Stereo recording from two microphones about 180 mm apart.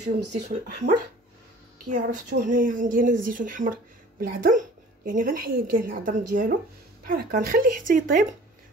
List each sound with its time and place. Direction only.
0.0 s speech: 40° right (ahead or behind)
1.9 s a woman's voice: 45° right (ahead or behind)